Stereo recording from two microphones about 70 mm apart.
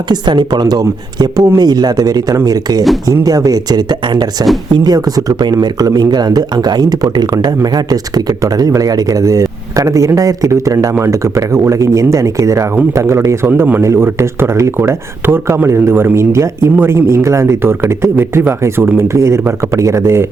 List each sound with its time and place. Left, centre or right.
0.1 s speech: right
1.5 s speech: right
13.8 s speech: right